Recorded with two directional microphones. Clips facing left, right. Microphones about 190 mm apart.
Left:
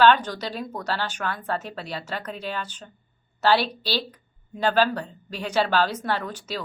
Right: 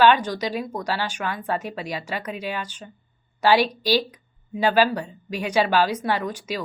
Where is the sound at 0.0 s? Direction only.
10° right (ahead or behind).